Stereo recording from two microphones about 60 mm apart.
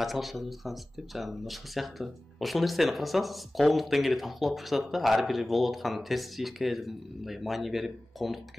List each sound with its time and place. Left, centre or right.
0.0 s speech: centre